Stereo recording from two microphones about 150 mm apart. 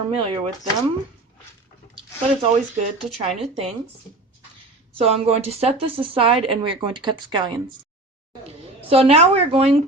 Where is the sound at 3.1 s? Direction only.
40° right (ahead or behind).